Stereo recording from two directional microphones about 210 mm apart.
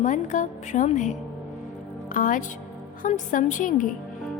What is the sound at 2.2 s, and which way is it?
A woman's voice, 40° left (ahead or behind).